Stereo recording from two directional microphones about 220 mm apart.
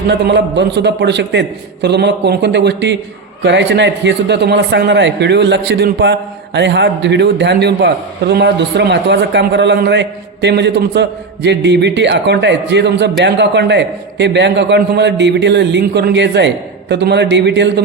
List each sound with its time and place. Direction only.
0.1 s a man's voice: 50° right (ahead or behind)